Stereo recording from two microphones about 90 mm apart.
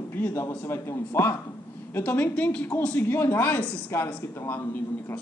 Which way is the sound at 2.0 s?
15° left (ahead or behind).